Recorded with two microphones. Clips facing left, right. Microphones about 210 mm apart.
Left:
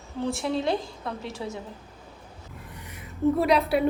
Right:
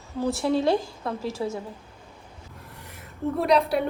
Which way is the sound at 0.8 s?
Centre (ahead or behind).